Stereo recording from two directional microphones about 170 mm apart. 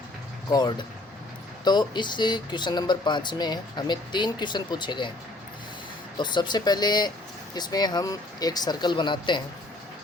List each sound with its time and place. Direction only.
0.5 s speech: 25° left (ahead or behind)
6.1 s speech: 25° left (ahead or behind)